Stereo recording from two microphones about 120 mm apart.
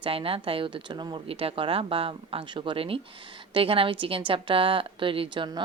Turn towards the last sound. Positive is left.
turn(degrees=-40)  # may be behind; listen again after turning